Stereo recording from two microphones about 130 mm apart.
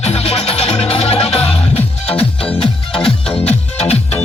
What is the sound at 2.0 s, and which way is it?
Music, 10° left (ahead or behind).